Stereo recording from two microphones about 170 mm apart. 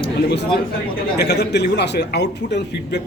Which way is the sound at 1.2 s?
75° left (ahead or behind).